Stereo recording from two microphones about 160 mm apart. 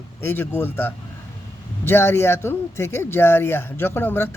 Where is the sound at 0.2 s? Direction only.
15° left (ahead or behind).